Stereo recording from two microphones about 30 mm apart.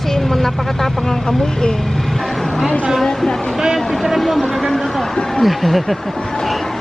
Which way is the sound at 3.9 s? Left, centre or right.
Centre.